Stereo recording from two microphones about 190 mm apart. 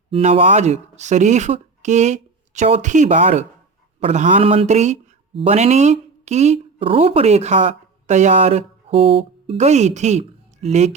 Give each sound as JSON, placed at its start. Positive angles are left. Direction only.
{"t": 0.1, "sound": "speech", "side_deg": -30}